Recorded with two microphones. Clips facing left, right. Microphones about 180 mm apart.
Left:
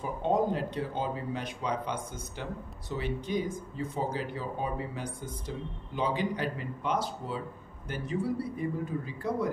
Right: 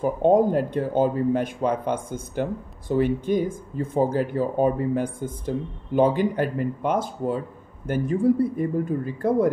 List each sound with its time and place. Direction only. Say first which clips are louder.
0.0 s speech: right 10 dB; 50° right (ahead or behind)